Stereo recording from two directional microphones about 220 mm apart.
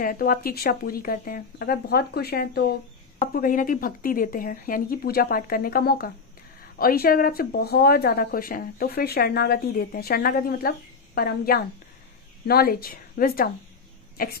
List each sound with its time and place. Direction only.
0.0 s speech: 40° left (ahead or behind)